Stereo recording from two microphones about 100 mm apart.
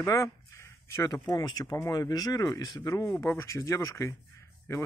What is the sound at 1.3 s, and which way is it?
Speech, 40° left (ahead or behind).